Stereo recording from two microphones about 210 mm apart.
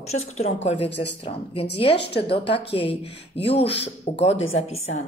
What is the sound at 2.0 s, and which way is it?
Speech, 50° left (ahead or behind).